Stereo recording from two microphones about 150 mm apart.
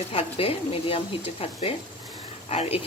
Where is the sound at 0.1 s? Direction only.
40° left (ahead or behind).